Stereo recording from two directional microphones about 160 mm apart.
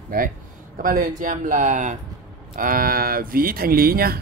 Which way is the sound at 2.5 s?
60° right (ahead or behind).